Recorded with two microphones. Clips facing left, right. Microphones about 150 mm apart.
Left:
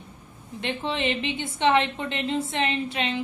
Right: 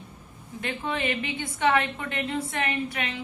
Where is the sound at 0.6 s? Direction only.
25° left (ahead or behind).